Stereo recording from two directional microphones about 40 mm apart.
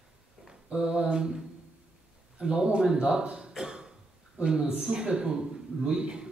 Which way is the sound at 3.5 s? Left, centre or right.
Centre.